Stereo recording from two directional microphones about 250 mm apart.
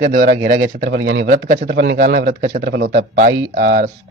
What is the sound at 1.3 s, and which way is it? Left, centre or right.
Speech, right.